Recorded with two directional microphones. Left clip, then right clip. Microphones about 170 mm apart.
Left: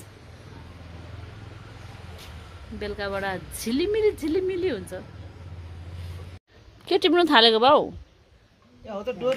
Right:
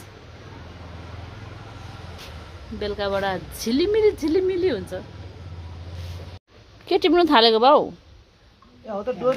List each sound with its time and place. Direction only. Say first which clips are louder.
2.8 s speech: right 5 dB; centre (ahead or behind)
6.9 s speech: right 2 dB; centre (ahead or behind)
8.8 s speech: right 4 dB; 20° left (ahead or behind)